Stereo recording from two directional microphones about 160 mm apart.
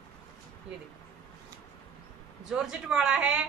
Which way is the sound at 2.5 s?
5° right (ahead or behind).